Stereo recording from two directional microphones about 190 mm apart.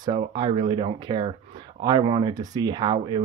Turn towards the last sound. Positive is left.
turn(degrees=-25)  # may be behind; listen again after turning